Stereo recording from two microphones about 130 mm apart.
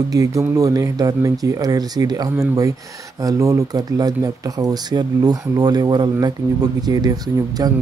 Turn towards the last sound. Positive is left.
turn(degrees=-30)  # may be behind; listen again after turning